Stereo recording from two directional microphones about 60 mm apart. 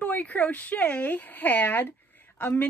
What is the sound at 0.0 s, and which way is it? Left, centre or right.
Speech, left.